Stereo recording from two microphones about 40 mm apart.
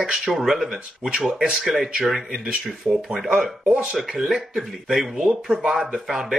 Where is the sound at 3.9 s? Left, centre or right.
Centre.